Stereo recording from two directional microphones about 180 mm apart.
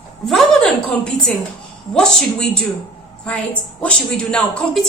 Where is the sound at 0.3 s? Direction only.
Centre (ahead or behind).